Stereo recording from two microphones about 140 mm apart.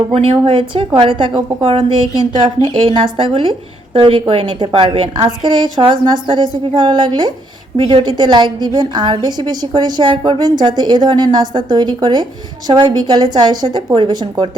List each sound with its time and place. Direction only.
0.1 s a woman's voice: 45° right (ahead or behind)